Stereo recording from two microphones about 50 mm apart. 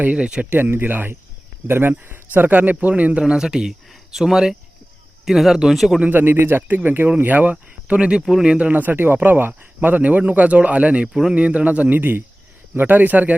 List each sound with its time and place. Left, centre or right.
0.0 s a man's voice: right
0.5 s a man's voice: right
2.3 s speech: right
3.4 s speech: centre
6.1 s a man's voice: right
7.9 s a man's voice: right
8.2 s speech: centre
8.4 s a man's voice: right
8.7 s speech: right
11.1 s speech: centre
11.3 s a man's voice: right